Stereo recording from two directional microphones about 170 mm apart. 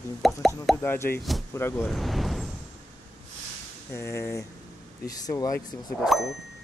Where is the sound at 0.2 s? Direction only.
Centre (ahead or behind).